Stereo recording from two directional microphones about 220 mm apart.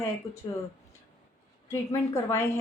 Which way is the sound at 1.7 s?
10° left (ahead or behind).